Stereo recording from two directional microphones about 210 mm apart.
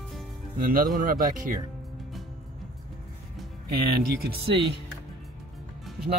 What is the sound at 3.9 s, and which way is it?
Speech, 50° right (ahead or behind).